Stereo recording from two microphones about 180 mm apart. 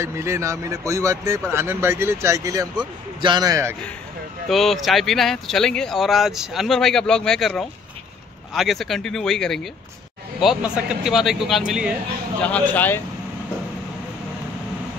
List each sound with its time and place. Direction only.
0.0 s speech: 15° right (ahead or behind)
4.5 s speech: centre (ahead or behind)